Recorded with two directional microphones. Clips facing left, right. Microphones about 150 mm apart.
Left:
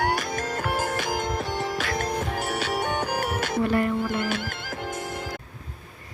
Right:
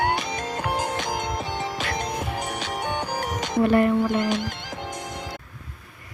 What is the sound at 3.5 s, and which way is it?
Music, 20° right (ahead or behind).